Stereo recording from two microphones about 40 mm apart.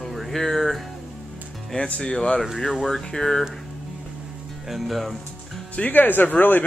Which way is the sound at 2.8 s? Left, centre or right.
Centre.